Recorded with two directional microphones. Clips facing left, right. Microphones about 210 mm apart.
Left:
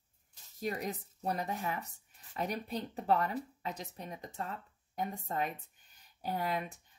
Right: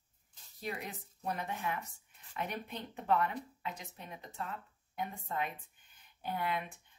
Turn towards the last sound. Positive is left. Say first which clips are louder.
# left 2 dB
turn(degrees=40)  # may be behind; listen again after turning